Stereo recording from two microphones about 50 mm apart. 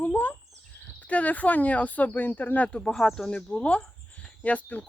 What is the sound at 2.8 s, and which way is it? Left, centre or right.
Speech, centre.